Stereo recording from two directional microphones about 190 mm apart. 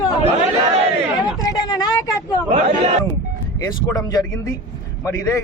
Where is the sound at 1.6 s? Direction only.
20° left (ahead or behind).